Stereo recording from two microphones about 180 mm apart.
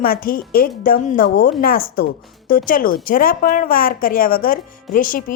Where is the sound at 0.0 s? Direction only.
55° left (ahead or behind).